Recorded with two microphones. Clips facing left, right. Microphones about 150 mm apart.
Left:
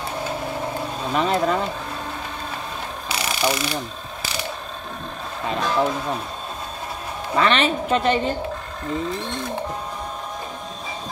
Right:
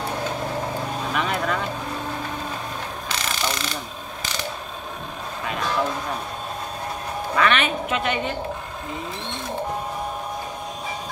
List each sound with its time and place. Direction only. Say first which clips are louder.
1.1 s a woman's voice: left 6 dB; 35° left (ahead or behind)
3.1 s jackhammer: left 5 dB; 10° left (ahead or behind)
7.3 s a woman's voice: left 2 dB; 30° left (ahead or behind)